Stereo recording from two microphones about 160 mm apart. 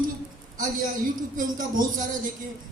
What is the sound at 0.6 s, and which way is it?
Speech, 55° right (ahead or behind).